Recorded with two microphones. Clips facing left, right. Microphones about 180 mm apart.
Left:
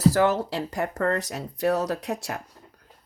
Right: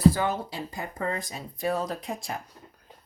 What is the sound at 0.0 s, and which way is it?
Speech, 75° left (ahead or behind).